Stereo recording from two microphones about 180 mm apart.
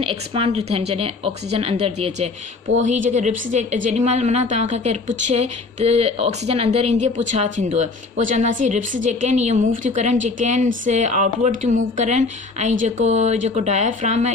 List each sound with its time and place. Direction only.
0.0 s speech: 30° right (ahead or behind)